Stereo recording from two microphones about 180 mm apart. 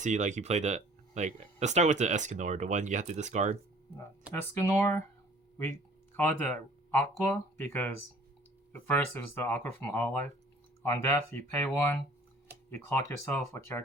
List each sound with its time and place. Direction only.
0.0 s speech: 40° right (ahead or behind)
4.3 s speech: 15° left (ahead or behind)
6.9 s speech: 10° left (ahead or behind)